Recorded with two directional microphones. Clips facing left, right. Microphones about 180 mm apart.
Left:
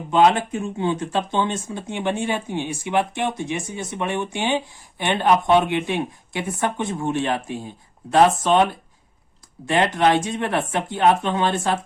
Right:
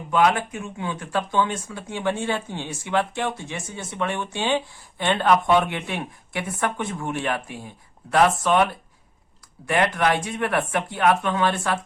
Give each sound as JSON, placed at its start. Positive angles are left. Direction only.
{"t": 0.1, "sound": "speech", "side_deg": 25}